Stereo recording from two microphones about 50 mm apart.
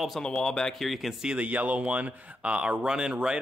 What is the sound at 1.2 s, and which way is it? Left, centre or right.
Speech, centre.